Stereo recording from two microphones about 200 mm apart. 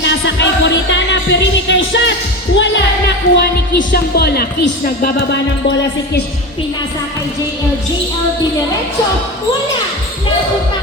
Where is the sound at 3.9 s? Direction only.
50° left (ahead or behind).